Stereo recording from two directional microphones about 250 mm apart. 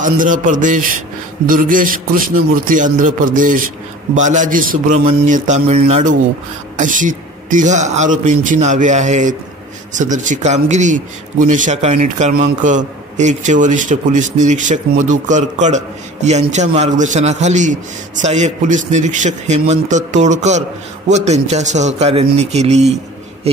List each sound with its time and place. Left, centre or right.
0.0 s a man's voice: right